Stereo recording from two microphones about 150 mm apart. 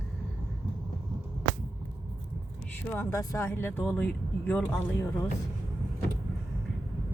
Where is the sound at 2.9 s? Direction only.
20° left (ahead or behind).